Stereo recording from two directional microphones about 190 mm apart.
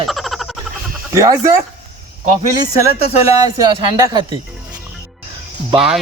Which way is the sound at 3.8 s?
20° right (ahead or behind).